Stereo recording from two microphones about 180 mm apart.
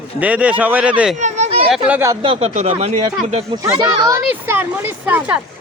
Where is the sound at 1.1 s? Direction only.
40° right (ahead or behind).